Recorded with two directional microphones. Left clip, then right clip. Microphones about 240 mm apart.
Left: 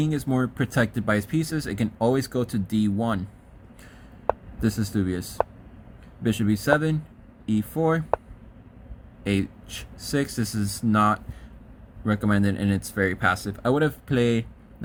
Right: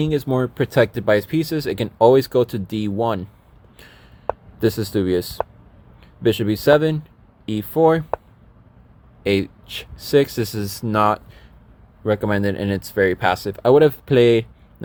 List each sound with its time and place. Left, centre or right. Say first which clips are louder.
0.0 s speech: right 6 dB; right
4.3 s a sound: even; centre
4.6 s speech: right 8 dB; right
9.2 s speech: right 8 dB; right